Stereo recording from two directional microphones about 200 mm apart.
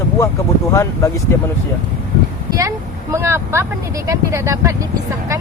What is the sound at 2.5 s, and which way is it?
Speech, 15° right (ahead or behind).